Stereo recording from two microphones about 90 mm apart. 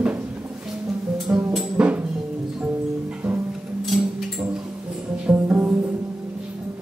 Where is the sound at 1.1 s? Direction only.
5° right (ahead or behind).